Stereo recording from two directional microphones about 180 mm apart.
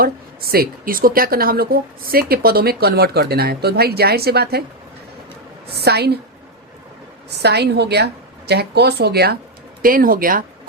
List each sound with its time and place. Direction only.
0.0 s speech: 55° right (ahead or behind)
5.7 s speech: 65° right (ahead or behind)
7.3 s speech: 65° right (ahead or behind)